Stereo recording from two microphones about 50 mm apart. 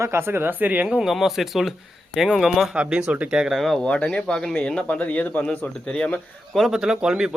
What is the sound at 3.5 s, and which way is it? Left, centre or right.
Speech, centre.